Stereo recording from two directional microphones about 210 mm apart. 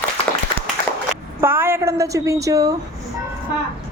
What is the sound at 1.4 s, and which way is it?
A woman's voice, 10° right (ahead or behind).